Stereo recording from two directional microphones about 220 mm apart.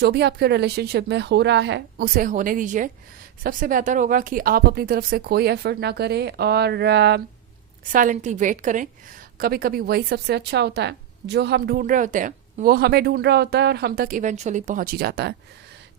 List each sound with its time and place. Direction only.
0.0 s speech: 50° right (ahead or behind)
7.9 s a woman's voice: 35° right (ahead or behind)